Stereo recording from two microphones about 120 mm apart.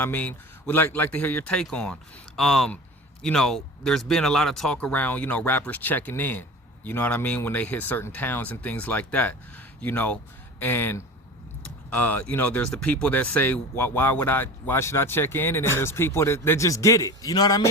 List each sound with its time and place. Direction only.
0.0 s speech: 15° left (ahead or behind); by 17.7 s 30° left (ahead or behind)